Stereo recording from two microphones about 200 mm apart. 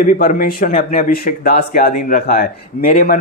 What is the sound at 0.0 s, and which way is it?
A man's voice, 40° left (ahead or behind).